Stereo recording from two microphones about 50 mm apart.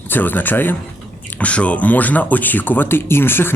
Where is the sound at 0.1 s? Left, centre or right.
Left.